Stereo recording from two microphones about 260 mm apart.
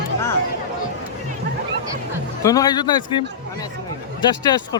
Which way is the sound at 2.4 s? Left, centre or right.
Centre.